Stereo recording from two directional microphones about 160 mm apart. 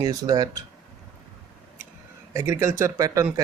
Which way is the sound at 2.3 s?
20° right (ahead or behind).